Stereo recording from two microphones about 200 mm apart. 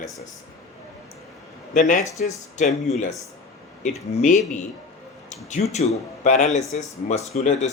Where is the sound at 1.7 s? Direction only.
40° left (ahead or behind).